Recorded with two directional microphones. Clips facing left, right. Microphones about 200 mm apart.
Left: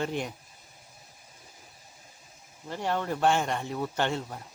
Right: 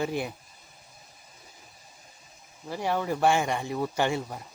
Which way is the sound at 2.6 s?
10° right (ahead or behind).